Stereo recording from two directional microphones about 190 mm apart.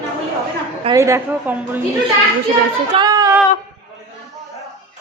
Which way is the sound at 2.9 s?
20° right (ahead or behind).